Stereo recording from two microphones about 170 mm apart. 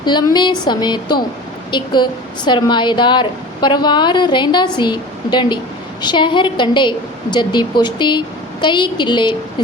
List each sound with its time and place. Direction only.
0.0 s a woman's voice: 25° left (ahead or behind)